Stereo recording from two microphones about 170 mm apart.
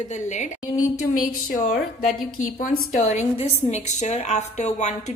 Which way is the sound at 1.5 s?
50° left (ahead or behind).